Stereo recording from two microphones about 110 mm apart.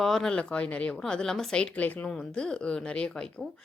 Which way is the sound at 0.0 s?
5° left (ahead or behind).